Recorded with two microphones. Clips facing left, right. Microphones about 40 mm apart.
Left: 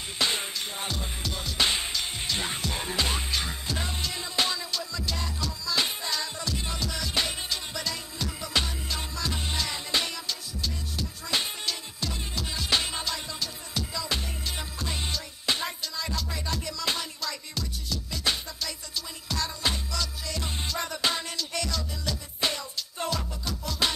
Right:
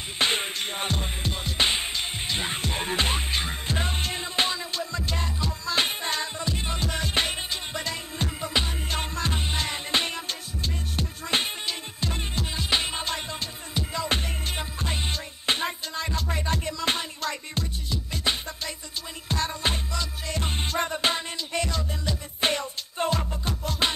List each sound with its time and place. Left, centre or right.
0.2 s music: right
2.6 s music: right
12.4 s music: right
13.0 s music: right
22.5 s music: right